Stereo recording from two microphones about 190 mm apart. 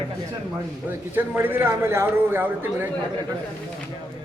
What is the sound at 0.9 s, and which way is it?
A man's voice, 10° right (ahead or behind).